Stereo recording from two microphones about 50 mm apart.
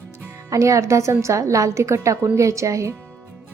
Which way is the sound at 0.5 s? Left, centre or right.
Right.